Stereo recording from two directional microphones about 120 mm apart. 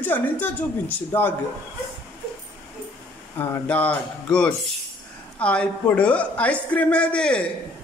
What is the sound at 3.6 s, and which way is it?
A man's voice, 10° left (ahead or behind).